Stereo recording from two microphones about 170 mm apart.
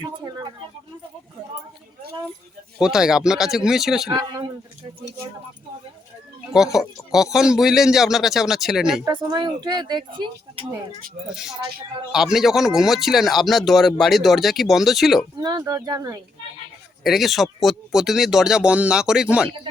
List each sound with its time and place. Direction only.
2.7 s speech: 5° right (ahead or behind)
4.1 s a woman's voice: 25° right (ahead or behind)
6.5 s speech: 5° right (ahead or behind)
9.2 s a woman's voice: 25° right (ahead or behind)
12.1 s speech: centre (ahead or behind)
15.4 s a woman's voice: 25° right (ahead or behind)
17.0 s speech: centre (ahead or behind)